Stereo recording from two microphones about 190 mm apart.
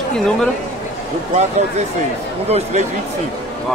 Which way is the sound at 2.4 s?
35° right (ahead or behind).